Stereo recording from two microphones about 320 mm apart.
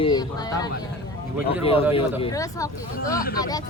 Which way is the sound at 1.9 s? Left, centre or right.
Centre.